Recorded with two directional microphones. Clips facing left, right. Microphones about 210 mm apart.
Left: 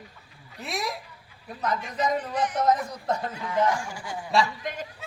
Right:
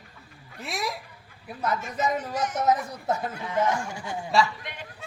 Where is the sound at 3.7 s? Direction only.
25° right (ahead or behind).